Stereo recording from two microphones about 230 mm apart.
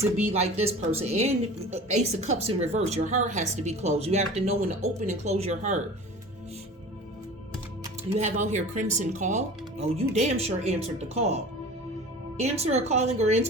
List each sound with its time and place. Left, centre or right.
0.3 s a woman's voice: right
8.1 s a woman's voice: right
12.4 s a woman's voice: right